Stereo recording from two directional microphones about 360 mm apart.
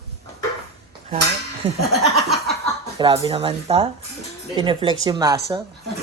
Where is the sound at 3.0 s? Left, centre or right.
Centre.